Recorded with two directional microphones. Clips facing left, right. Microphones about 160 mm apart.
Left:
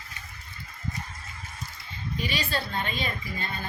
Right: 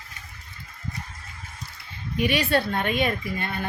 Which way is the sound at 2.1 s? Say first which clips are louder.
Right 8 dB; 65° right (ahead or behind).